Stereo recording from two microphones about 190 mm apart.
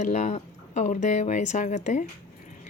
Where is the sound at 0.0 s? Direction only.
40° left (ahead or behind).